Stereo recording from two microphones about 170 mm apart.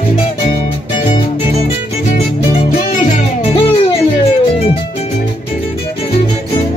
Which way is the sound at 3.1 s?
35° left (ahead or behind).